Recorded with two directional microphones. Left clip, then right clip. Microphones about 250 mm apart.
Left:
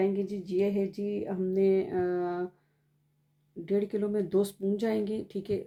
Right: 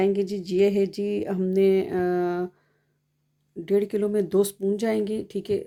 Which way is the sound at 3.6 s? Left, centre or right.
Right.